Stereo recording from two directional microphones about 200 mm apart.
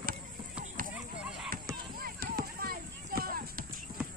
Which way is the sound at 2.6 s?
45° right (ahead or behind).